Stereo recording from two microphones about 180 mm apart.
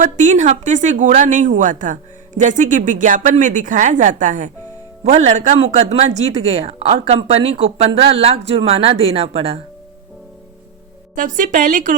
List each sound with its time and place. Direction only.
0.0 s a woman's voice: 45° right (ahead or behind)
11.1 s a woman's voice: 45° right (ahead or behind)